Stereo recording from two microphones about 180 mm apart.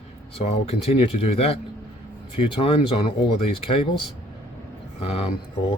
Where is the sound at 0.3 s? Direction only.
35° left (ahead or behind).